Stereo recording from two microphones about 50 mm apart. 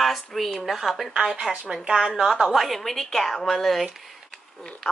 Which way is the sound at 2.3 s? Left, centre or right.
Centre.